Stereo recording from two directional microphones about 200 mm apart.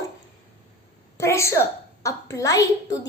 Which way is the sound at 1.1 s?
15° left (ahead or behind).